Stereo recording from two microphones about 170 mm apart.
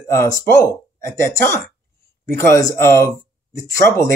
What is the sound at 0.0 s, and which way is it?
Speech, 15° left (ahead or behind).